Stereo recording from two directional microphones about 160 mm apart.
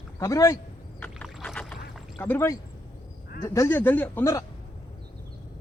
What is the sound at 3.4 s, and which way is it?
Speech, 15° left (ahead or behind).